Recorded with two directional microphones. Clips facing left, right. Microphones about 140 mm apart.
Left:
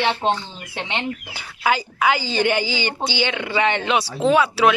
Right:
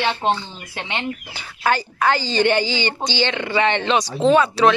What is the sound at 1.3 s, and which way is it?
Speech, 10° left (ahead or behind).